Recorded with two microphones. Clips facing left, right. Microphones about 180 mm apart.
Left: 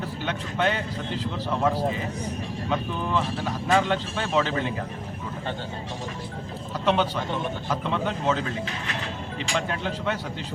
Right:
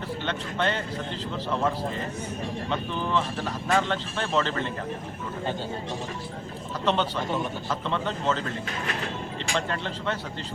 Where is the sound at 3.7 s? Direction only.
10° left (ahead or behind).